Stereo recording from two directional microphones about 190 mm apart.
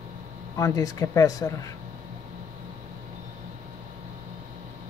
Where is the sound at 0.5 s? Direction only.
15° left (ahead or behind).